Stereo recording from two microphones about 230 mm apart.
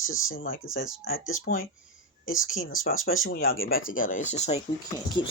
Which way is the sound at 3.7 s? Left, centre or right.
Left.